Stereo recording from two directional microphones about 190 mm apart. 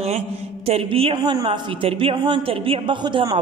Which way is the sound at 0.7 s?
30° right (ahead or behind).